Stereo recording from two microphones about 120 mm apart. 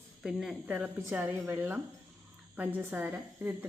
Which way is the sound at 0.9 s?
20° right (ahead or behind).